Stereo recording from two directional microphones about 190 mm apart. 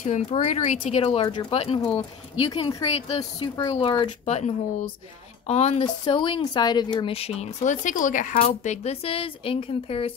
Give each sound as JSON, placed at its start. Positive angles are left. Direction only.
{"t": 0.0, "sound": "speech", "side_deg": 35}